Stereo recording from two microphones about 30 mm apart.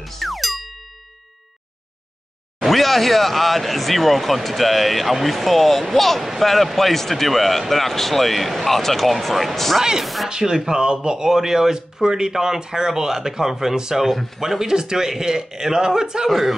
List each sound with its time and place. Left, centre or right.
0.0 s music: centre
2.6 s speech: centre
10.3 s speech: centre
14.0 s speech: centre
14.4 s speech: centre